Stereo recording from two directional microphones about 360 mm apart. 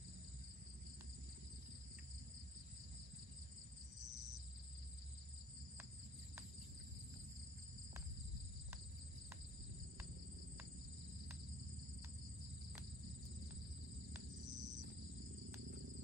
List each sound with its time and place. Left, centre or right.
14.4 s cricket: right